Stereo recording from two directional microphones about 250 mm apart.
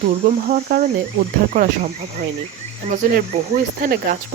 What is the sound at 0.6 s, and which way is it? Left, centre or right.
Cricket, right.